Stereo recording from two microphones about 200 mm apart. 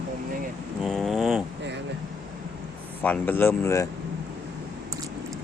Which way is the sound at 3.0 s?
10° left (ahead or behind).